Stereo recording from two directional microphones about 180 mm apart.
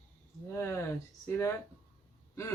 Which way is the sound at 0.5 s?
15° left (ahead or behind).